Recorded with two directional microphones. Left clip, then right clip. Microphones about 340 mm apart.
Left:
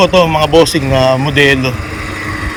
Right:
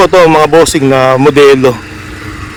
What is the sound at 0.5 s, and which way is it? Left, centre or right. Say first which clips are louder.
Speech: right 3 dB; centre.